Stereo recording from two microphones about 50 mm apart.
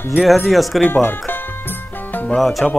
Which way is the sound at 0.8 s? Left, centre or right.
Left.